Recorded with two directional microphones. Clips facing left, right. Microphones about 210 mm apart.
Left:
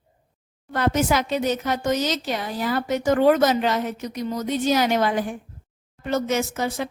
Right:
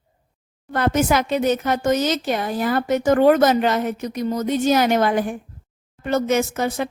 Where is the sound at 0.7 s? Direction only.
55° right (ahead or behind).